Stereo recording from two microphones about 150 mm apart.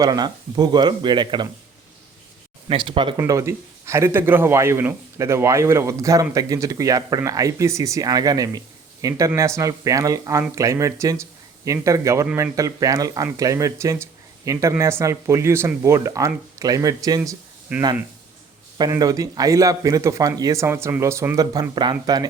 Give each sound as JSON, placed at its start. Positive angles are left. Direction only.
{"t": 0.0, "sound": "speech", "side_deg": -25}
{"t": 2.6, "sound": "speech", "side_deg": -35}
{"t": 3.2, "sound": "speech", "side_deg": -20}
{"t": 18.8, "sound": "speech", "side_deg": -25}